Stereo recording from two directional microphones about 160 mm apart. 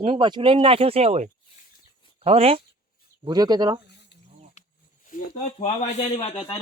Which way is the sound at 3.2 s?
25° right (ahead or behind).